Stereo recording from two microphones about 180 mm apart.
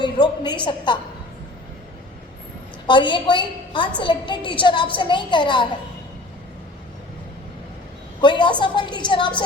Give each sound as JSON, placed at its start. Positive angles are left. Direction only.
{"t": 0.0, "sound": "a woman's voice", "side_deg": 25}
{"t": 2.8, "sound": "a woman's voice", "side_deg": 25}
{"t": 8.2, "sound": "a woman's voice", "side_deg": 25}